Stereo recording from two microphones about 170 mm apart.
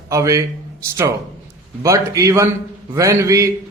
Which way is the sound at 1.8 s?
20° right (ahead or behind).